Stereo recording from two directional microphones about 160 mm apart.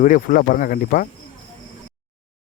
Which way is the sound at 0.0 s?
55° left (ahead or behind).